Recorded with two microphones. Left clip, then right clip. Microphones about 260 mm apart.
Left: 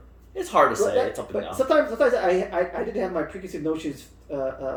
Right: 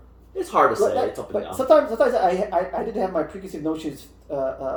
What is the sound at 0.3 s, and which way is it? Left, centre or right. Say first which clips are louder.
Speech: right 1 dB; centre.